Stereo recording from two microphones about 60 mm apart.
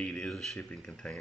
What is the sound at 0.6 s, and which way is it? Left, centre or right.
Speech, centre.